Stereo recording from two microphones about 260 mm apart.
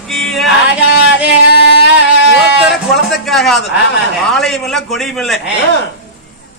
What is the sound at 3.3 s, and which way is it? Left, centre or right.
Speech, centre.